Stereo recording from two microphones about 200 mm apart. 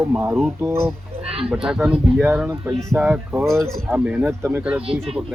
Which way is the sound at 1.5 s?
5° right (ahead or behind).